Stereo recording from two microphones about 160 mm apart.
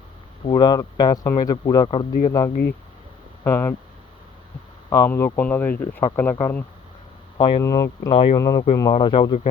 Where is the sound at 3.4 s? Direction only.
15° left (ahead or behind).